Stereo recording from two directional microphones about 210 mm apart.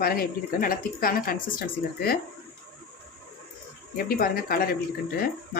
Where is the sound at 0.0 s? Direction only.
45° left (ahead or behind).